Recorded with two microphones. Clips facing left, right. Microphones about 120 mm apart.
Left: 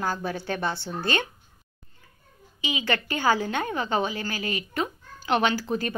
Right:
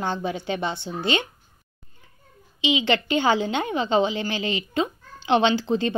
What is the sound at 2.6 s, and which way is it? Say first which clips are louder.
Speech: right 6 dB; 20° right (ahead or behind).